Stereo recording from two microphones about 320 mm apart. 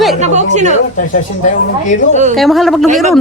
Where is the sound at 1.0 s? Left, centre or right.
Left.